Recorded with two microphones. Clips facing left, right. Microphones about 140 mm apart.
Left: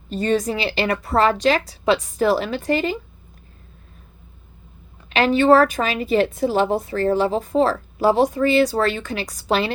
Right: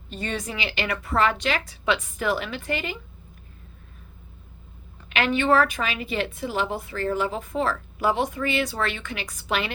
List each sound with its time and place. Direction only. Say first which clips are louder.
0.1 s a woman's voice: left 10 dB; 40° left (ahead or behind)
5.0 s a woman's voice: left 7 dB; 35° left (ahead or behind)